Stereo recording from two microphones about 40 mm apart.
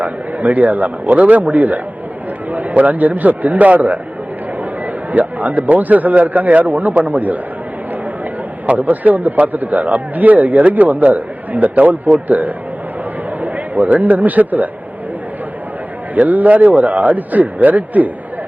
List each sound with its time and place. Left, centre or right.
0.0 s speech: right
16.2 s speech: right